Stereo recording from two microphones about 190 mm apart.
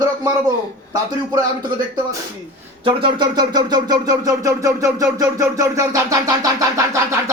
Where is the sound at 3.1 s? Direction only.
20° right (ahead or behind).